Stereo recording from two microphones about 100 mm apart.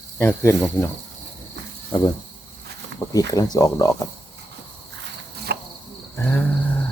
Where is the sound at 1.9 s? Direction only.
40° left (ahead or behind).